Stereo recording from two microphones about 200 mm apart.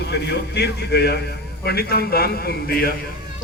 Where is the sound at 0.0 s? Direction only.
55° left (ahead or behind).